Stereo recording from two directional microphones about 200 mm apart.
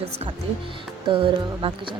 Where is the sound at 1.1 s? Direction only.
25° right (ahead or behind).